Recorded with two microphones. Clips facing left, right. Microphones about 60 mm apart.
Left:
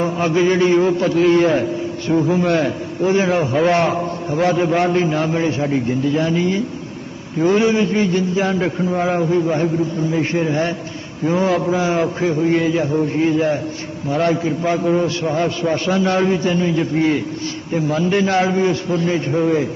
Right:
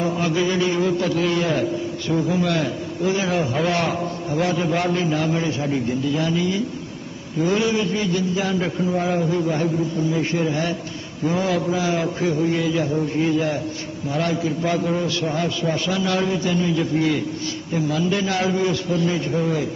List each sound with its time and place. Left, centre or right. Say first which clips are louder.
0.0 s a man's voice: left 4 dB; left